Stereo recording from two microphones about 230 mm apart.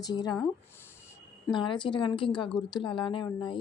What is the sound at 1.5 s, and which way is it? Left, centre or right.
Speech, left.